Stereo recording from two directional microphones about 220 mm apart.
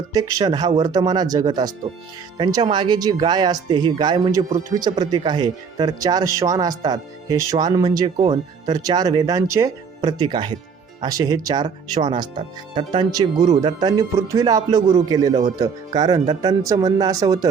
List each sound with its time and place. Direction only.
0.1 s speech: 15° right (ahead or behind)